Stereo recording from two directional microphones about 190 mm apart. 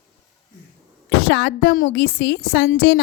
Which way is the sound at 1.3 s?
60° left (ahead or behind).